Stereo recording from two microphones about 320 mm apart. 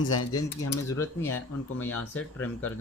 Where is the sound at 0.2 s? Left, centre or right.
Left.